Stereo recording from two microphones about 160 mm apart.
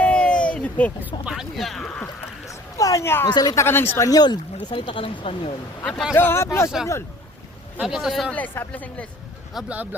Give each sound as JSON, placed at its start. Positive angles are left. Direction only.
{"t": 0.0, "sound": "a sound", "side_deg": 5}
{"t": 1.2, "sound": "speech", "side_deg": -5}
{"t": 2.5, "sound": "a sound", "side_deg": 20}
{"t": 3.2, "sound": "speech", "side_deg": 25}
{"t": 5.8, "sound": "speech", "side_deg": 0}
{"t": 6.1, "sound": "speech", "side_deg": 15}
{"t": 7.8, "sound": "speech", "side_deg": 0}
{"t": 9.6, "sound": "speech", "side_deg": -10}